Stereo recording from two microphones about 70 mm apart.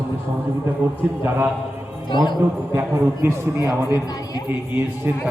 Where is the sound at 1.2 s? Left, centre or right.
Right.